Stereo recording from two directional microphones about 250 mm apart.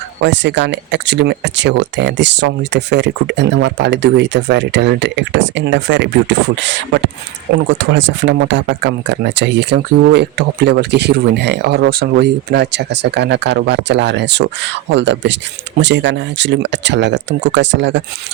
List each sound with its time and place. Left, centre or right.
0.2 s speech: right